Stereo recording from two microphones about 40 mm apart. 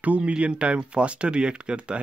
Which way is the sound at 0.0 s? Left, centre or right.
Right.